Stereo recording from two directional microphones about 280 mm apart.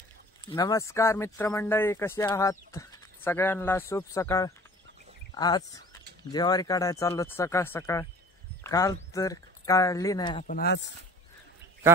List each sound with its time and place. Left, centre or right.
0.5 s speech: centre
10.4 s speech: left